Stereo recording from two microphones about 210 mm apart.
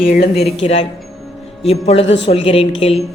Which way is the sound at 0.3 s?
30° left (ahead or behind).